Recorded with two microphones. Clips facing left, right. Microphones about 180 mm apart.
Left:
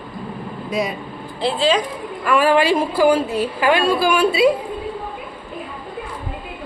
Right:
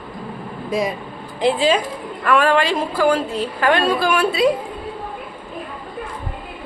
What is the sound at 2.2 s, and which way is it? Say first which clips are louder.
A woman's voice: left 1 dB; 5° left (ahead or behind).